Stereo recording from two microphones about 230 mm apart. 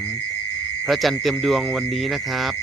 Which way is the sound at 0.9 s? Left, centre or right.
Centre.